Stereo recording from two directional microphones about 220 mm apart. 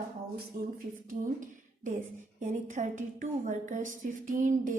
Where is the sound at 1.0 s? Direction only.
35° right (ahead or behind).